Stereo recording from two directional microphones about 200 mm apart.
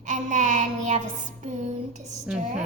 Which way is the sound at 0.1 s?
35° right (ahead or behind).